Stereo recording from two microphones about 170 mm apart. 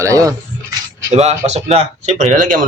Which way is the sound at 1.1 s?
40° right (ahead or behind).